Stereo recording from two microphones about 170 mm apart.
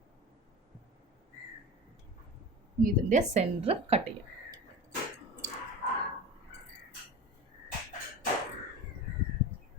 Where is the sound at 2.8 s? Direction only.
45° right (ahead or behind).